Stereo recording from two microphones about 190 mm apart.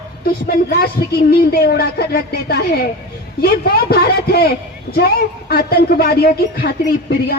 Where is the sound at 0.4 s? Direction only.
55° left (ahead or behind).